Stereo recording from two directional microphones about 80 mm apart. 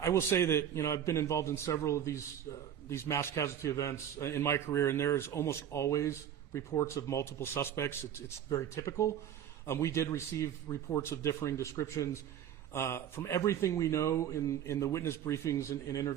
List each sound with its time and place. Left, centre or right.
0.0 s a man's voice: left